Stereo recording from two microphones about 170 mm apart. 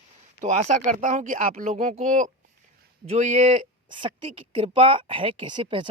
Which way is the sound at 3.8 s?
30° right (ahead or behind).